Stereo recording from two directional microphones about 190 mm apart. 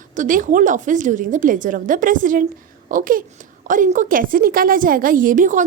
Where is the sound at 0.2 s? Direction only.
45° right (ahead or behind).